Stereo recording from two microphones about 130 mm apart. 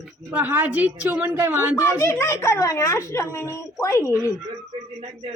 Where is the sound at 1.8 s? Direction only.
20° left (ahead or behind).